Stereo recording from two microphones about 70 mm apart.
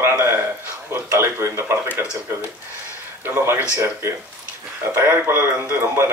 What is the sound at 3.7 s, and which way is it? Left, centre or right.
Speech, right.